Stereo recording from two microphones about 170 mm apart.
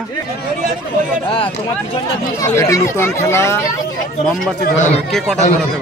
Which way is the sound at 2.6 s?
20° left (ahead or behind).